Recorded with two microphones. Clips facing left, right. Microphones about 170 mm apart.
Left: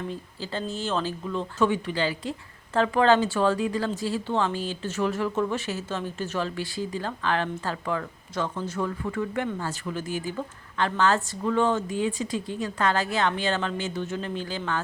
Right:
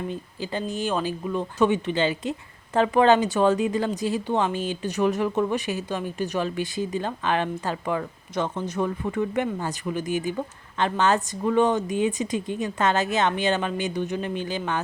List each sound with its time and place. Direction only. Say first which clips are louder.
0.1 s speech: right 3 dB; 15° right (ahead or behind)